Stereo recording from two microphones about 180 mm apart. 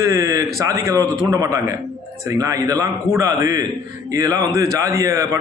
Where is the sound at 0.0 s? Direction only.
15° right (ahead or behind).